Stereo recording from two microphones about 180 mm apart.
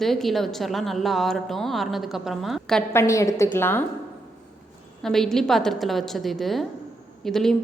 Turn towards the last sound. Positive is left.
turn(degrees=0)  # may be behind; listen again after turning